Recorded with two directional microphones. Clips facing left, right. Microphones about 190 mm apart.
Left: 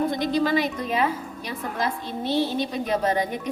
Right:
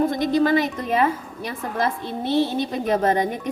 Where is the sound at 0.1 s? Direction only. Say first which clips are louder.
Right 4 dB; 50° right (ahead or behind).